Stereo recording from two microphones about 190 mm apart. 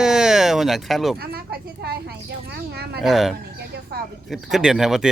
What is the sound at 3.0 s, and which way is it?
Speech, centre (ahead or behind).